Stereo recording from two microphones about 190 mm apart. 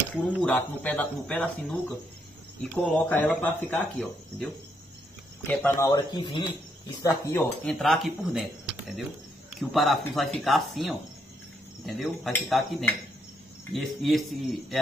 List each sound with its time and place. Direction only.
0.1 s speech: centre (ahead or behind)
5.5 s speech: 10° left (ahead or behind)
7.6 s speech: centre (ahead or behind)